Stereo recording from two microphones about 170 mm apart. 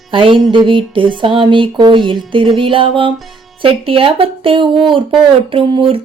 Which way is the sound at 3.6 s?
30° right (ahead or behind).